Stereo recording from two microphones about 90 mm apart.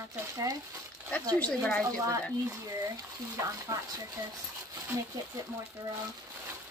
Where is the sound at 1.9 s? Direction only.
40° right (ahead or behind).